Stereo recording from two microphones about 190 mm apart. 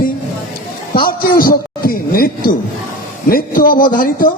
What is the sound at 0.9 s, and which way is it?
A man's voice, 50° left (ahead or behind).